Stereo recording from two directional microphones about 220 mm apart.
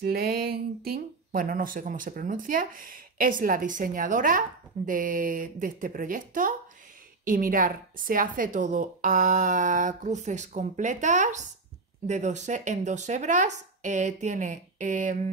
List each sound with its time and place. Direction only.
0.0 s speech: 45° right (ahead or behind)